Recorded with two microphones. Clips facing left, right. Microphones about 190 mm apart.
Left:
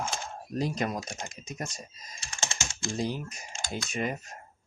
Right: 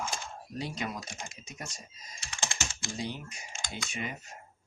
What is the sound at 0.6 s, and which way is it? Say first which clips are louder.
Speech: left 6 dB; 45° left (ahead or behind).